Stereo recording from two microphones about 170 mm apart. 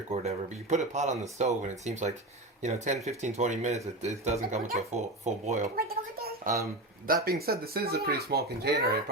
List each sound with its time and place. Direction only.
0.1 s speech: 40° right (ahead or behind)
5.7 s a sound: 60° right (ahead or behind)
7.3 s speech: 65° right (ahead or behind)